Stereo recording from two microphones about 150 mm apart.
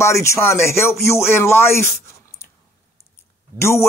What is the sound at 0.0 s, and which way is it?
Speech, 20° left (ahead or behind).